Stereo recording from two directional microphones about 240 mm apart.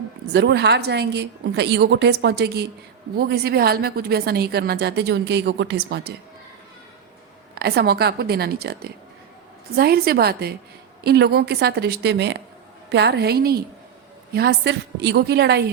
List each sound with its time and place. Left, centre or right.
0.3 s a woman's voice: right
7.5 s a woman's voice: right